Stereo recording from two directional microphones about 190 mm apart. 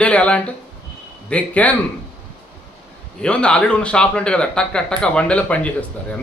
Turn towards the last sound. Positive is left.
turn(degrees=5)  # may be behind; listen again after turning